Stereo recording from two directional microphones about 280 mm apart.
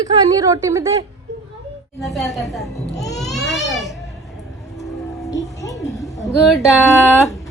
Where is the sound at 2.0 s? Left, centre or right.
Centre.